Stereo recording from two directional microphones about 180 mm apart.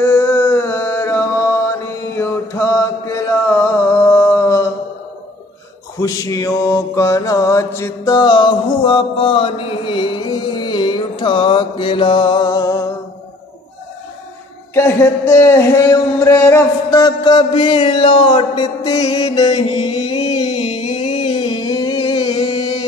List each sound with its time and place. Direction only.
0.0 s a sound: 15° left (ahead or behind)
2.0 s mantra: 15° left (ahead or behind)
5.9 s mantra: 20° left (ahead or behind)
14.7 s mantra: 15° left (ahead or behind)
18.9 s music: 35° left (ahead or behind)
19.2 s mantra: 20° left (ahead or behind)
19.5 s music: 30° left (ahead or behind)